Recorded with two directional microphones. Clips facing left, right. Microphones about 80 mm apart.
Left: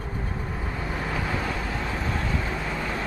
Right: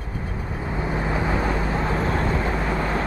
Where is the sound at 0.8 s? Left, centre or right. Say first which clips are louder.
Right 6 dB; right.